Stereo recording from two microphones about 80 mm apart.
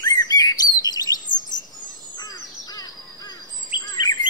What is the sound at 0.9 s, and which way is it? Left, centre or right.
Chirp, left.